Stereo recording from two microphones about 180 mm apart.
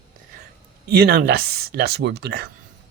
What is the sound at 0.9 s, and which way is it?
Speech, 60° right (ahead or behind).